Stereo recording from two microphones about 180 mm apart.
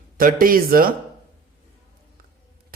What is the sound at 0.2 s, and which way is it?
Speech, 50° right (ahead or behind).